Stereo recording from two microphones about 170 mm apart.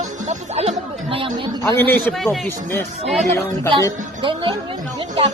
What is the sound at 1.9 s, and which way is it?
Speech, 10° left (ahead or behind).